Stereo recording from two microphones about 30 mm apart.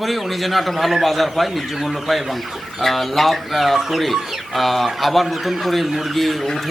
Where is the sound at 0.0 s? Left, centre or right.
Centre.